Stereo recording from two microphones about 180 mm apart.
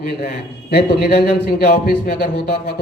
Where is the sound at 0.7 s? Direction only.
65° left (ahead or behind).